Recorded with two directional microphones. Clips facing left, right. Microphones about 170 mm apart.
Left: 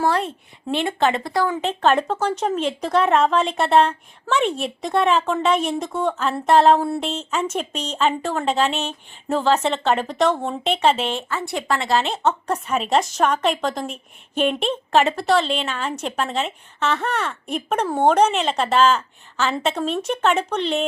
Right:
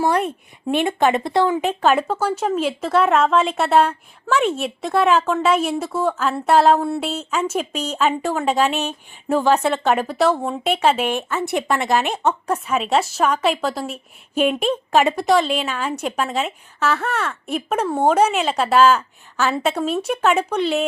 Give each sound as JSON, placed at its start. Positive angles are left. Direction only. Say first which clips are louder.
{"t": 0.0, "sound": "speech", "louder": "right 2 dB", "side_deg": -15}
{"t": 1.6, "sound": "speech", "louder": "right 1 dB", "side_deg": -10}